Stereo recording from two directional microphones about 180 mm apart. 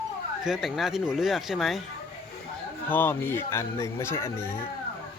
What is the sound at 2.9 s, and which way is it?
Speech, 10° left (ahead or behind).